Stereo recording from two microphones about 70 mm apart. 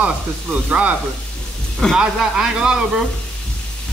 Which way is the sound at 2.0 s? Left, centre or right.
Centre.